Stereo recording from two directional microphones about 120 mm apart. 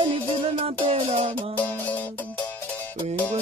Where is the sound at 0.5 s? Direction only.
50° right (ahead or behind).